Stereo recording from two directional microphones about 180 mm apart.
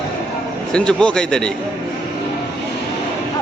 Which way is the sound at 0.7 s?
5° left (ahead or behind).